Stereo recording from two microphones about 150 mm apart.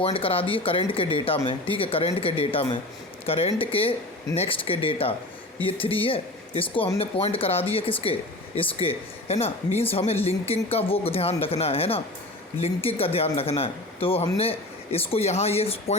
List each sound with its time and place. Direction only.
0.0 s speech: 40° left (ahead or behind)